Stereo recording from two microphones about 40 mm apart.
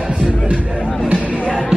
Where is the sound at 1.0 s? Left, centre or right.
Right.